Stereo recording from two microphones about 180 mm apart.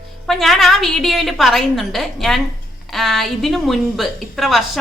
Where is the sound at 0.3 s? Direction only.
Centre (ahead or behind).